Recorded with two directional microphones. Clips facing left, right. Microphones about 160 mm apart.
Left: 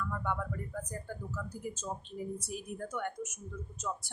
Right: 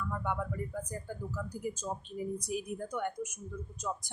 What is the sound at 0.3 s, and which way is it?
A woman's voice, 10° right (ahead or behind).